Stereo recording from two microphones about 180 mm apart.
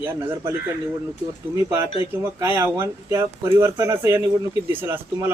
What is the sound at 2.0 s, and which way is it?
Speech, 15° right (ahead or behind).